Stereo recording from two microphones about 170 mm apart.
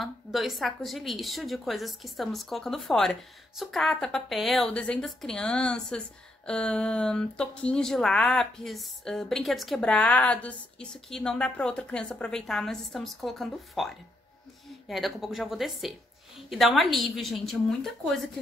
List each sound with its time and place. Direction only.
0.0 s a woman's voice: centre (ahead or behind)